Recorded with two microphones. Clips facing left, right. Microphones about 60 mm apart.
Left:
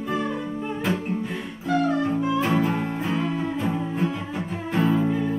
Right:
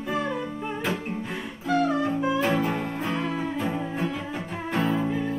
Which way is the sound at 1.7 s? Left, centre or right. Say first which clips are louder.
Left 1 dB; centre.